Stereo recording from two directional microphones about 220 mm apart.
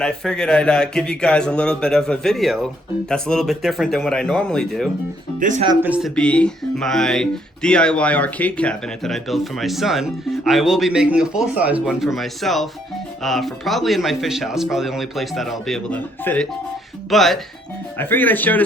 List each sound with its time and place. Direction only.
0.0 s speech: 5° left (ahead or behind)
5.4 s speech: 35° right (ahead or behind)
5.8 s speech: 5° right (ahead or behind)
6.1 s speech: 5° left (ahead or behind)